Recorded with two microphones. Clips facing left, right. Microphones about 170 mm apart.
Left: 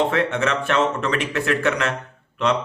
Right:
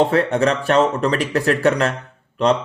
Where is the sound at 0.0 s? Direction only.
35° right (ahead or behind).